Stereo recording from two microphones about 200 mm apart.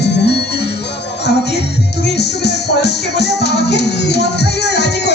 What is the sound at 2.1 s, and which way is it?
Music, 55° left (ahead or behind).